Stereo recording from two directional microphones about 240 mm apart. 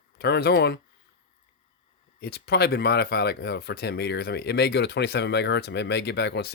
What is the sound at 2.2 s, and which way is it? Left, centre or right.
Speech, left.